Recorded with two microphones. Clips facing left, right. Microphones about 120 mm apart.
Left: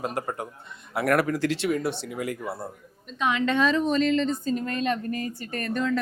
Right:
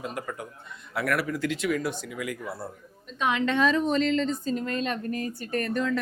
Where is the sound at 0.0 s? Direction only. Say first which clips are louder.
Left 4 dB; 40° left (ahead or behind).